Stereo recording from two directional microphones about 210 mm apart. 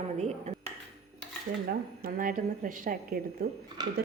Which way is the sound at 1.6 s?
40° right (ahead or behind).